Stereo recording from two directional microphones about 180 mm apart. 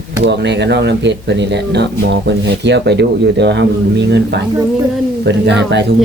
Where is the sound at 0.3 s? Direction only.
75° right (ahead or behind).